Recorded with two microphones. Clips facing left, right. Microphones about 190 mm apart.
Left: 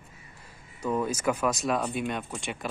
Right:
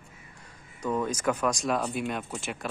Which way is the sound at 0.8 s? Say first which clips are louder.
Left 1 dB; 10° left (ahead or behind).